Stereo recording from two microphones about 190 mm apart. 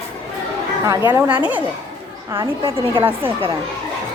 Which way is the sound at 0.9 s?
15° right (ahead or behind).